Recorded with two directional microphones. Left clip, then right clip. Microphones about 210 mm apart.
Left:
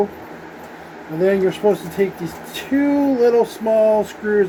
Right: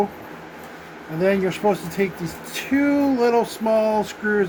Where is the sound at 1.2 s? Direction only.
40° right (ahead or behind).